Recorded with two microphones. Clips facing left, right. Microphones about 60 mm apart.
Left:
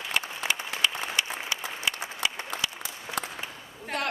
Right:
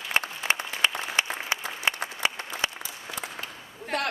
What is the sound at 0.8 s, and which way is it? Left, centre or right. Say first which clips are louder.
Applause: right 2 dB; right.